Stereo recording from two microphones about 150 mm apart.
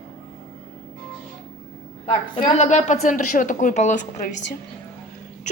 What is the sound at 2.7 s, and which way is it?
A woman's voice, 50° left (ahead or behind).